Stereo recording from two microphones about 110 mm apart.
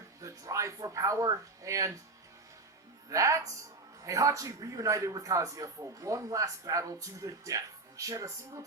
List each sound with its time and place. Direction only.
0.2 s speech: 30° right (ahead or behind)
3.1 s a man's voice: 30° right (ahead or behind)